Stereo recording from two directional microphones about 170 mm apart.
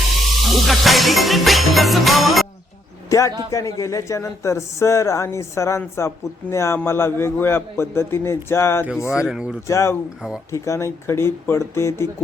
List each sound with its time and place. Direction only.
0.7 s music: centre (ahead or behind)
3.1 s a man's voice: 20° left (ahead or behind)
9.1 s music: 5° right (ahead or behind)
9.6 s speech: 15° left (ahead or behind)